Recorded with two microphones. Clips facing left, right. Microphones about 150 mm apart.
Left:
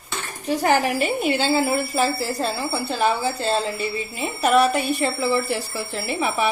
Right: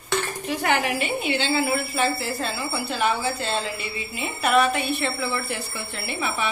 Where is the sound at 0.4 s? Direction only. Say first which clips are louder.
Left 7 dB; 35° left (ahead or behind).